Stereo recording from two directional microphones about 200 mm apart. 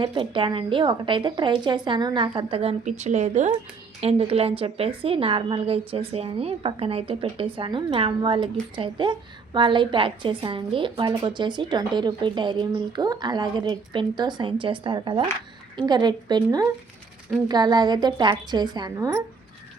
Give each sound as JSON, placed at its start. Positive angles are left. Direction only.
{"t": 0.0, "sound": "a woman's voice", "side_deg": -25}